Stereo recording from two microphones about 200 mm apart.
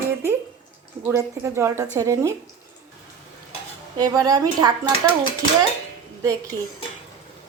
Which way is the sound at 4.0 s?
20° right (ahead or behind).